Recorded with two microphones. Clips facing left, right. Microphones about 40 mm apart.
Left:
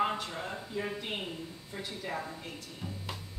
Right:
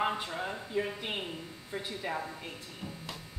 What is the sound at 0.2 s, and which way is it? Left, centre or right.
A woman's voice, centre.